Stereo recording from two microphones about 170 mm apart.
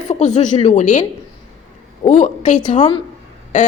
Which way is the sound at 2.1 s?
45° left (ahead or behind).